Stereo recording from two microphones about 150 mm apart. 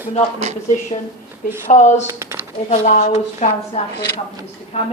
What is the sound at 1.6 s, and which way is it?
Speech, 55° left (ahead or behind).